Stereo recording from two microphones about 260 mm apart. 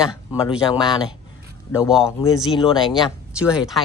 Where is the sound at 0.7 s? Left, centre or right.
Centre.